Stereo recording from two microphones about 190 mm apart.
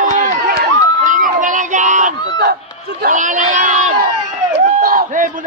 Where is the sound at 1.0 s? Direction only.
45° right (ahead or behind).